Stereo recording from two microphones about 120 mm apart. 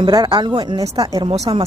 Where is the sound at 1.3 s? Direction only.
50° right (ahead or behind).